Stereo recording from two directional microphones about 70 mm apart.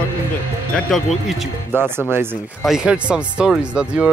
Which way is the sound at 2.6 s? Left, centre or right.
Centre.